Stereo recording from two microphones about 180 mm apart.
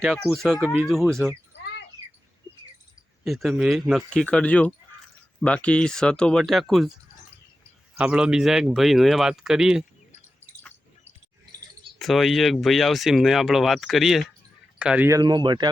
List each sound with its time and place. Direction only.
0.0 s speech: 5° right (ahead or behind)
3.2 s speech: centre (ahead or behind)
7.9 s speech: 5° right (ahead or behind)
11.9 s speech: centre (ahead or behind); by 15.7 s 25° right (ahead or behind)